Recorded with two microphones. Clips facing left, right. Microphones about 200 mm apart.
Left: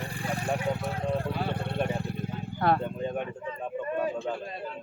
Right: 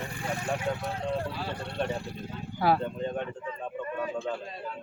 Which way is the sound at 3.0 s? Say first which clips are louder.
Left 1 dB; 10° left (ahead or behind).